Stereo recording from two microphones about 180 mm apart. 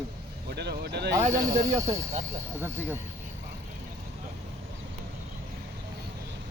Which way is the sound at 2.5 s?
10° right (ahead or behind).